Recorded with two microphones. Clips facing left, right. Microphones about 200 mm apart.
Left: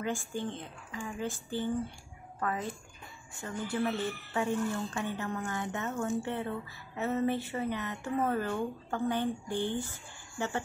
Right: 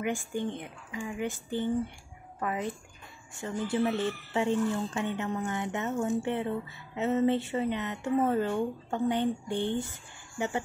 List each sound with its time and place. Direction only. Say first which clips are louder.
0.0 s a woman's voice: right 3 dB; 20° right (ahead or behind)